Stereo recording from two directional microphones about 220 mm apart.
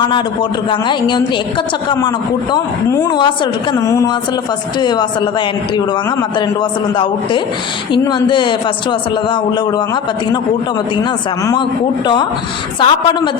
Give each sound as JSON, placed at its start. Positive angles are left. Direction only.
{"t": 0.7, "sound": "a woman's voice", "side_deg": 20}
{"t": 6.6, "sound": "a woman's voice", "side_deg": 20}
{"t": 12.0, "sound": "a woman's voice", "side_deg": 20}